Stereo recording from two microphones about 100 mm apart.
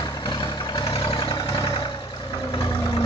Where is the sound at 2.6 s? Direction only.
35° left (ahead or behind).